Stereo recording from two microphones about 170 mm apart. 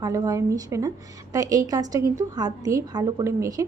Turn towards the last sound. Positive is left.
turn(degrees=-20)  # may be behind; listen again after turning